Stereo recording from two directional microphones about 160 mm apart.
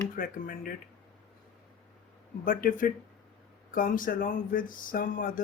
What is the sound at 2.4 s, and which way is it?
Speech, 60° left (ahead or behind).